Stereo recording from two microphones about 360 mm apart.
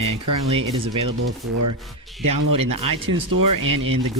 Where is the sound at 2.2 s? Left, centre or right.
Right.